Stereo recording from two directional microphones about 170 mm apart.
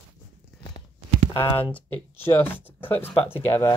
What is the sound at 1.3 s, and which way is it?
Speech, 25° left (ahead or behind).